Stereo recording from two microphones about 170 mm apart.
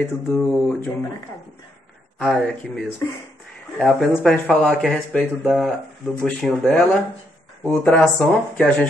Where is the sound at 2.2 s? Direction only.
Centre (ahead or behind).